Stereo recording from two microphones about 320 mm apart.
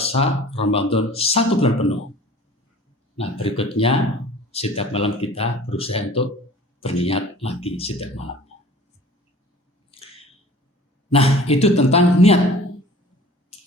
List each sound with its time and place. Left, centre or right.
0.0 s speech: centre
3.2 s speech: centre
9.9 s squish: centre
11.1 s speech: centre
13.5 s a sound: centre